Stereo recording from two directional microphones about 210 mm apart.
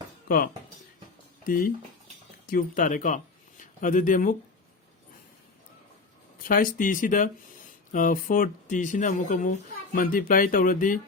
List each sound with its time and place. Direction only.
0.3 s speech: 45° left (ahead or behind)
6.5 s speech: 40° left (ahead or behind)